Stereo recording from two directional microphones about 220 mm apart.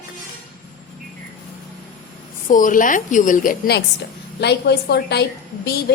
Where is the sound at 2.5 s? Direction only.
35° left (ahead or behind).